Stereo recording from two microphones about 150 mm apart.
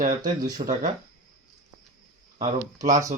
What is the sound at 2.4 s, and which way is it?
Speech, 55° right (ahead or behind).